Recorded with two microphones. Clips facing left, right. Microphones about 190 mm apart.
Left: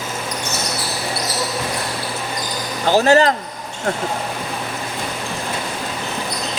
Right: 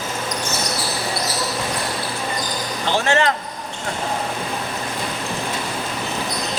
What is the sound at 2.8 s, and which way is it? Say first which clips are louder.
Speech: left 6 dB; 40° left (ahead or behind).